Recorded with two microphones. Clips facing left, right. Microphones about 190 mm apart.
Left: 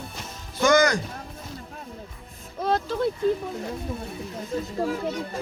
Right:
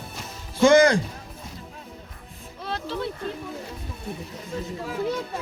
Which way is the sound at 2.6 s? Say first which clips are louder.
Left 6 dB; 45° left (ahead or behind).